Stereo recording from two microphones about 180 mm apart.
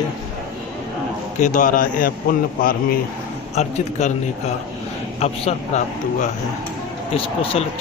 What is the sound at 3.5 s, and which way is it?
Speech, 40° left (ahead or behind).